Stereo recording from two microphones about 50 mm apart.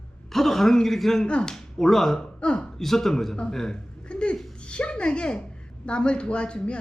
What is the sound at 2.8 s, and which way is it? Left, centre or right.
Speech, centre.